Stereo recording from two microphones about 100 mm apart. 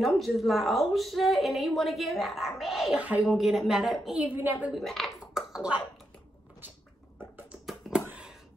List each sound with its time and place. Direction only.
0.0 s a woman's voice: centre (ahead or behind)
4.2 s a woman's voice: 20° right (ahead or behind)
4.7 s speech: 5° left (ahead or behind)